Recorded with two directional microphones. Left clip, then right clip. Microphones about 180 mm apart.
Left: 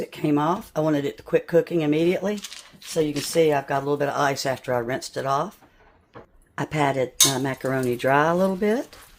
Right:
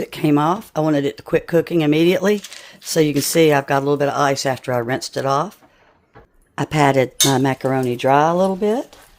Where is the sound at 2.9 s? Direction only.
55° right (ahead or behind); by 5.5 s 30° right (ahead or behind).